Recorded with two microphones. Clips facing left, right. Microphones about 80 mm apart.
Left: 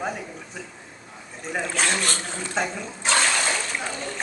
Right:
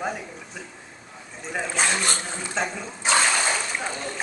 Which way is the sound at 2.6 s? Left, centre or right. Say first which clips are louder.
Left 1 dB; centre.